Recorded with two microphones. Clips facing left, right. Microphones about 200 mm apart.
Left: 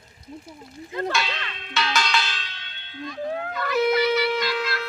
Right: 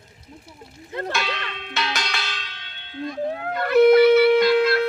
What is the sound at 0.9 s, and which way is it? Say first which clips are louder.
Speech: even; 60° right (ahead or behind).